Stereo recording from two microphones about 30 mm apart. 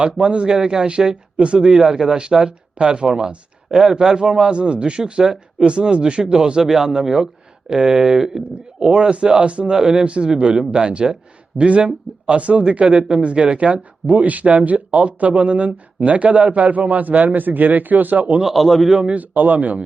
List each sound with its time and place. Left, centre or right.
0.0 s speech: right
0.4 s speech: right
0.9 s speech: right
2.1 s speech: right
8.8 s speech: right
9.7 s speech: right
10.1 s speech: right
11.5 s speech: right
12.8 s speech: right
13.2 s speech: right
18.4 s a man's voice: centre
19.1 s speech: right
19.5 s speech: right